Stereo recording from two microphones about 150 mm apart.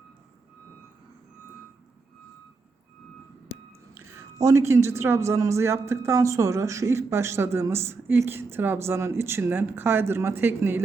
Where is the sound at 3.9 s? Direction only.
20° right (ahead or behind).